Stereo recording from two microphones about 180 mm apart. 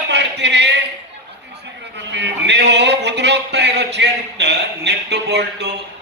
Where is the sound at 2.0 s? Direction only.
75° right (ahead or behind).